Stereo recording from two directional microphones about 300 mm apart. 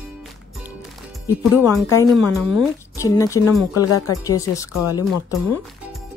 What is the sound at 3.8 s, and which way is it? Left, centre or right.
Speech, left.